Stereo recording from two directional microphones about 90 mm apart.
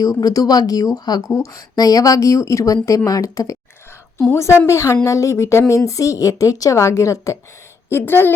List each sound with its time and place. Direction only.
0.0 s speech: 45° left (ahead or behind)
4.6 s a woman's voice: 35° left (ahead or behind)